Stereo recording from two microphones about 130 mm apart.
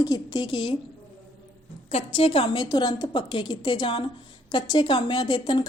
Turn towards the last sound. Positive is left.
turn(degrees=40)  # may be behind; listen again after turning